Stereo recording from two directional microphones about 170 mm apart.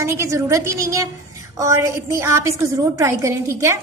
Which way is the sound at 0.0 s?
15° right (ahead or behind).